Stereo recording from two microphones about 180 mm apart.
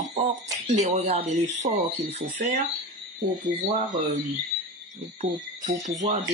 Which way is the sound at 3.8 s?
20° right (ahead or behind).